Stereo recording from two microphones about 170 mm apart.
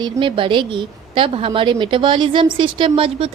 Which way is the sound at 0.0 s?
30° right (ahead or behind).